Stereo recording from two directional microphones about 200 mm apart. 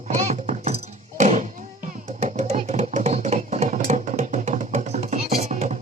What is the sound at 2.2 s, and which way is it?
Music, 35° right (ahead or behind).